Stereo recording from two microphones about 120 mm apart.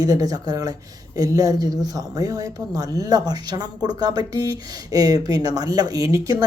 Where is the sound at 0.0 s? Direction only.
30° right (ahead or behind).